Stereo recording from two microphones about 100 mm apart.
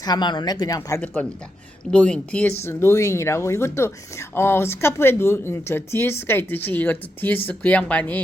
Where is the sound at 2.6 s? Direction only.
25° left (ahead or behind).